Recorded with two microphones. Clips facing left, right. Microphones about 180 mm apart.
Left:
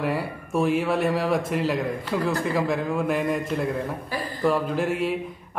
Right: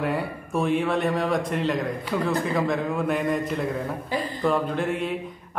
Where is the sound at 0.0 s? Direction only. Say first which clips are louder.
Even; centre (ahead or behind).